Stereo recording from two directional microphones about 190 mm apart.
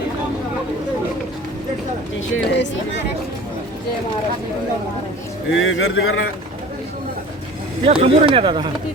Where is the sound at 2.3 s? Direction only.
65° left (ahead or behind).